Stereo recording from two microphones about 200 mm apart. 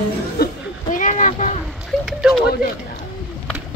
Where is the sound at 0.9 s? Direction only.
40° left (ahead or behind).